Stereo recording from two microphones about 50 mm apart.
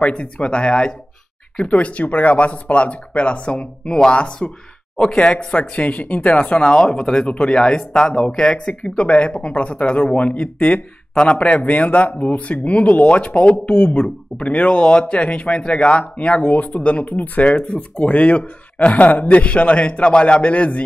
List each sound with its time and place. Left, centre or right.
0.0 s speech: left; by 8.5 s centre
8.5 s speech: left
13.7 s speech: left
14.3 s speech: left